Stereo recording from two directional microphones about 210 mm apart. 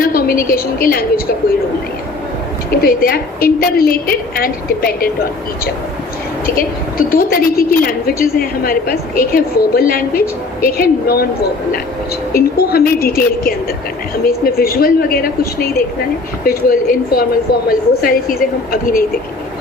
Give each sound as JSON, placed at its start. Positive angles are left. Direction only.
{"t": 0.0, "sound": "a woman's voice", "side_deg": 45}
{"t": 2.8, "sound": "a woman's voice", "side_deg": 45}
{"t": 6.4, "sound": "a woman's voice", "side_deg": 45}
{"t": 12.3, "sound": "a woman's voice", "side_deg": 45}